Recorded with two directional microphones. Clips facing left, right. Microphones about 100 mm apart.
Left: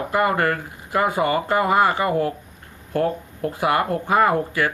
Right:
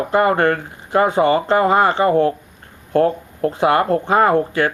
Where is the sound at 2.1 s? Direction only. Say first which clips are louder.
Right 6 dB; 40° right (ahead or behind).